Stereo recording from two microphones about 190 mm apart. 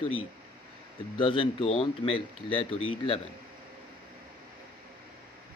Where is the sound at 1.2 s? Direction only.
25° left (ahead or behind).